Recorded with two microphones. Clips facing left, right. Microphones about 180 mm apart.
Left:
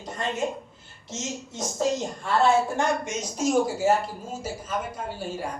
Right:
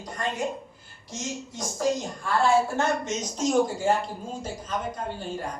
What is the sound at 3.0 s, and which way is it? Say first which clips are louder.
A woman's voice: left 1 dB; 10° left (ahead or behind).